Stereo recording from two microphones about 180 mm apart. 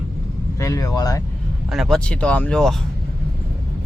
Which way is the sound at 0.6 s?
15° left (ahead or behind).